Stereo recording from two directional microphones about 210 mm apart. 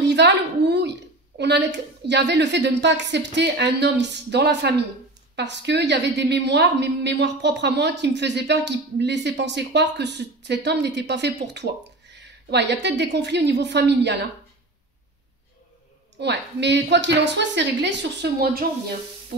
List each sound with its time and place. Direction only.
0.0 s a sound: 55° right (ahead or behind)
1.4 s speech: 55° right (ahead or behind)
16.2 s speech: 55° right (ahead or behind)